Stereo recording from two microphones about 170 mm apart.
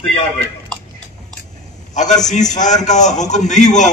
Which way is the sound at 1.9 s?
45° left (ahead or behind).